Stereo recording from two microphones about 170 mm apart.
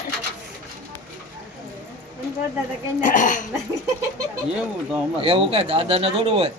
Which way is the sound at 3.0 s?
50° left (ahead or behind).